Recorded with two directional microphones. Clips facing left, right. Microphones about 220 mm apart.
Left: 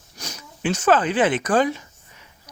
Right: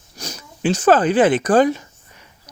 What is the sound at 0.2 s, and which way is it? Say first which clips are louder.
Speech: right 4 dB; 35° right (ahead or behind).